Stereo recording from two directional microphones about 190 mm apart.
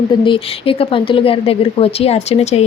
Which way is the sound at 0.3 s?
30° left (ahead or behind).